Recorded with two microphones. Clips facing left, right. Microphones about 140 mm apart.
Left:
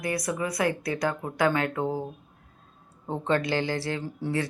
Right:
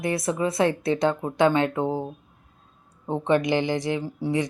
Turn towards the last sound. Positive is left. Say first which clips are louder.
# right 4 dB
turn(degrees=-15)  # may be behind; listen again after turning